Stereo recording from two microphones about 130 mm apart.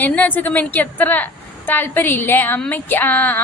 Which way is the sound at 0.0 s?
15° left (ahead or behind).